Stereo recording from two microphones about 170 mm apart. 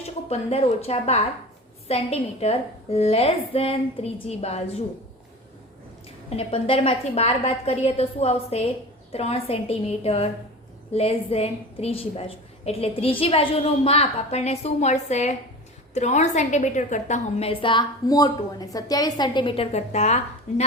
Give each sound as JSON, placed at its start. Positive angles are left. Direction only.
{"t": 0.0, "sound": "a woman's voice", "side_deg": 35}
{"t": 6.3, "sound": "a woman's voice", "side_deg": 35}